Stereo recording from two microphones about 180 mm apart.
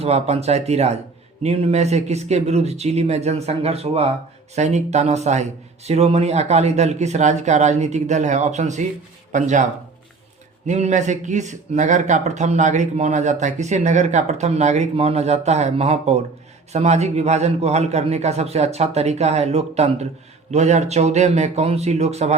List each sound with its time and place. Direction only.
0.0 s speech: 35° right (ahead or behind)
10.7 s speech: 40° right (ahead or behind)